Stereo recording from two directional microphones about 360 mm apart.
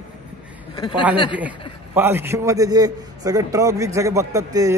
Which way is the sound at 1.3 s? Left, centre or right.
Centre.